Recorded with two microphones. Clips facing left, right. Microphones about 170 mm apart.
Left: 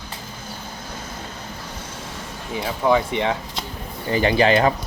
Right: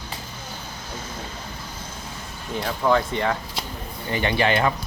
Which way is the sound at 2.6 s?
10° left (ahead or behind).